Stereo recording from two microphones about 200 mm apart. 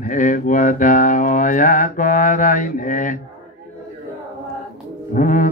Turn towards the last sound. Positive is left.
turn(degrees=40)  # may be behind; listen again after turning